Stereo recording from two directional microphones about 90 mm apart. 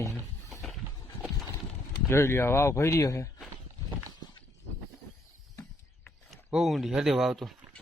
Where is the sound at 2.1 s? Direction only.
30° left (ahead or behind).